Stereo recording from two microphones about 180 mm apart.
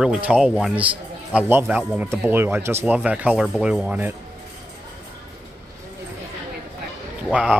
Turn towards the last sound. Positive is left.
turn(degrees=-5)  # may be behind; listen again after turning